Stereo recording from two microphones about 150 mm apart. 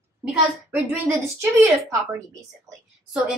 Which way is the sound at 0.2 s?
10° right (ahead or behind).